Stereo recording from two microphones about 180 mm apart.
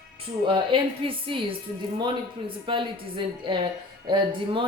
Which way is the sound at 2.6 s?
30° right (ahead or behind).